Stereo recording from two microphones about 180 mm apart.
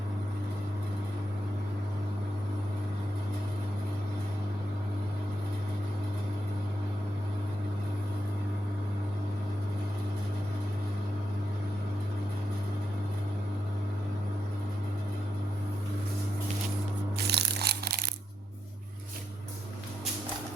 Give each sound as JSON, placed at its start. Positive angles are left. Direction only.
{"t": 17.2, "sound": "crushing", "side_deg": -65}